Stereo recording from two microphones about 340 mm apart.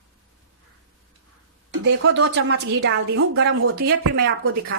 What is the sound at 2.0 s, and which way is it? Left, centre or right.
A woman's voice, right.